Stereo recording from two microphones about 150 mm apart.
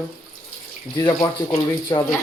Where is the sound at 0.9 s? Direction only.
25° left (ahead or behind).